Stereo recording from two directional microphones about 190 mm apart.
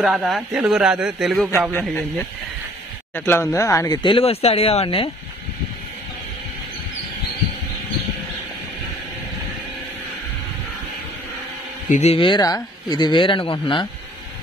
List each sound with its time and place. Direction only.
0.0 s a man's voice: centre (ahead or behind); by 5.1 s 30° left (ahead or behind)
11.9 s speech: 35° left (ahead or behind)